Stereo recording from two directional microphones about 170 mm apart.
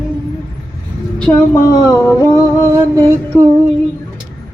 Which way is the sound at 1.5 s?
20° left (ahead or behind).